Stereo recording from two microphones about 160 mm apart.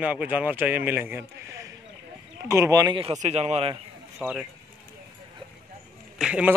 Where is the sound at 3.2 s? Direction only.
45° right (ahead or behind).